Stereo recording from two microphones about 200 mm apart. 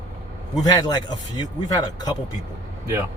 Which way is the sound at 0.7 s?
20° left (ahead or behind).